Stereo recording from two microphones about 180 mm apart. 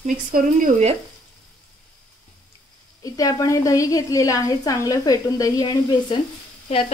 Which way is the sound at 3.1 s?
20° left (ahead or behind).